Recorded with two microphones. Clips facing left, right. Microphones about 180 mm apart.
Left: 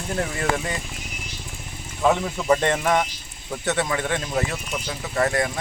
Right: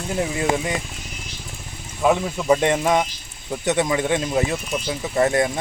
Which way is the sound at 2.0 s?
10° right (ahead or behind).